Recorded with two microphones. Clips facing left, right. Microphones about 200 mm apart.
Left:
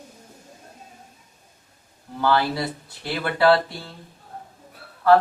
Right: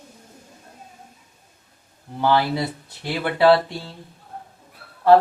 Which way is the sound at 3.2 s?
20° right (ahead or behind).